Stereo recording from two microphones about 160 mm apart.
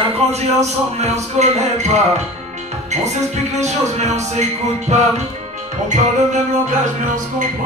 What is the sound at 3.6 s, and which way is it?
A man's voice, 45° right (ahead or behind).